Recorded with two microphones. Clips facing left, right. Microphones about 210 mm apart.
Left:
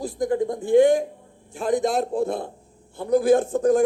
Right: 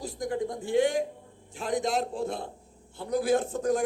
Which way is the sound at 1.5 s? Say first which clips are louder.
Left 6 dB; 50° left (ahead or behind).